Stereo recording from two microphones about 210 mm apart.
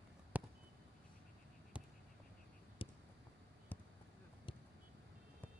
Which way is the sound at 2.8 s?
25° left (ahead or behind).